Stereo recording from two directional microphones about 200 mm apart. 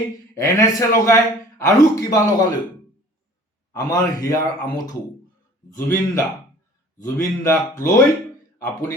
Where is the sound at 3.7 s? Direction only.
20° left (ahead or behind).